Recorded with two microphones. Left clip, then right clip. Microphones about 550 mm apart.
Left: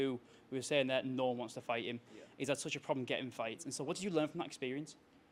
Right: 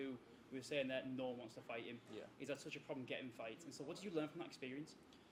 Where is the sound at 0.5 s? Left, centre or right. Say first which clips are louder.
Left 9 dB; left.